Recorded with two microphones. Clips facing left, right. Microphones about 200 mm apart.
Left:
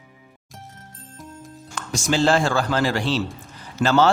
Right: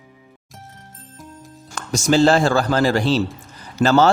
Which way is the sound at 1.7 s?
40° right (ahead or behind).